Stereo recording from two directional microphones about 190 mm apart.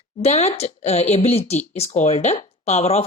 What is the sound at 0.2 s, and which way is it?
A woman's voice, 35° left (ahead or behind).